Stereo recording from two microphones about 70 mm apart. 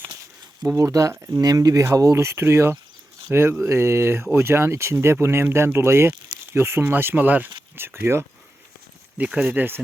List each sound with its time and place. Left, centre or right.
0.1 s a sound: right
0.8 s speech: right
1.3 s speech: right
2.1 s speech: right
7.8 s speech: right
9.1 s speech: centre
9.5 s speech: right